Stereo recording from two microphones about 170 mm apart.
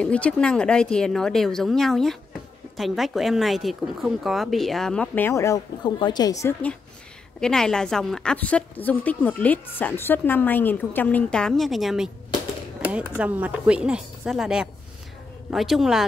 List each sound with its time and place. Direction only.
0.0 s speech: 5° left (ahead or behind)
7.3 s a woman's voice: 5° left (ahead or behind)